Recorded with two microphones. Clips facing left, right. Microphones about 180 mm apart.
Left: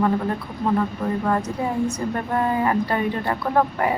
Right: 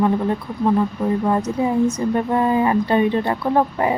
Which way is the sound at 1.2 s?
20° right (ahead or behind).